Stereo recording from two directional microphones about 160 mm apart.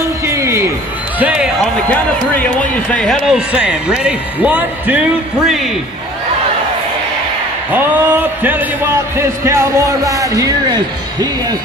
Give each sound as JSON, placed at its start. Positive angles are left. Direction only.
{"t": 0.3, "sound": "a sound", "side_deg": -20}
{"t": 1.2, "sound": "speech", "side_deg": -5}
{"t": 1.9, "sound": "speech", "side_deg": 10}
{"t": 3.3, "sound": "speech", "side_deg": -5}
{"t": 7.7, "sound": "speech", "side_deg": -10}